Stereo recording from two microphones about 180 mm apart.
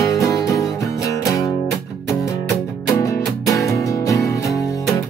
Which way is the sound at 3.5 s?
20° left (ahead or behind).